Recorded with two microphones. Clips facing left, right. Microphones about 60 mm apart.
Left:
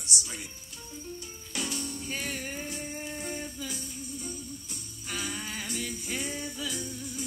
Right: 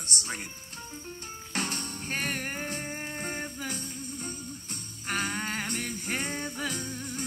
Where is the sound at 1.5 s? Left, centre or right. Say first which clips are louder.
Right 1 dB; right.